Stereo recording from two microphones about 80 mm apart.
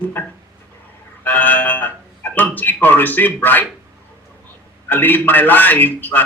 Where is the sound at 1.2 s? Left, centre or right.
Left.